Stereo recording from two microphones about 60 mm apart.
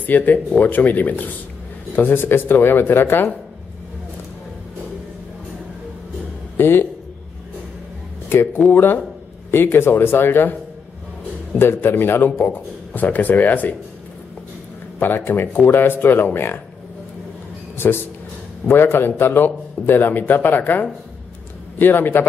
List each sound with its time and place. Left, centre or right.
0.0 s a man's voice: left
6.5 s speech: left
8.6 s a man's voice: left
15.0 s a man's voice: left
17.7 s a man's voice: left